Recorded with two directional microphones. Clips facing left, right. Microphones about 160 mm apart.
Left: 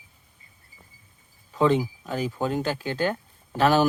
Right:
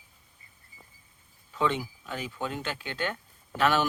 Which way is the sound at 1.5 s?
40° left (ahead or behind).